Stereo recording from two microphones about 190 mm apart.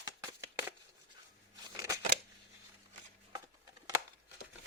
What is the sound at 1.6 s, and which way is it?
Scissors, 20° right (ahead or behind).